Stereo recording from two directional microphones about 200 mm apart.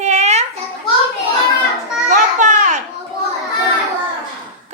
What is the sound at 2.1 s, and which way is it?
Children playing, 40° right (ahead or behind).